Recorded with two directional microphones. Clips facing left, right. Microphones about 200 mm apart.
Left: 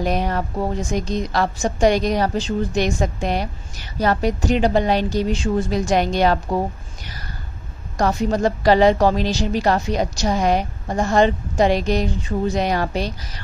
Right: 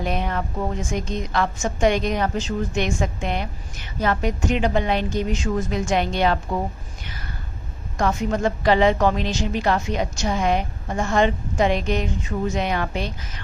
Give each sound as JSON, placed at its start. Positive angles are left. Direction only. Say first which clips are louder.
{"t": 0.0, "sound": "a woman's voice", "louder": "left 4 dB", "side_deg": 40}
{"t": 8.0, "sound": "a woman's voice", "louder": "left 3 dB", "side_deg": 35}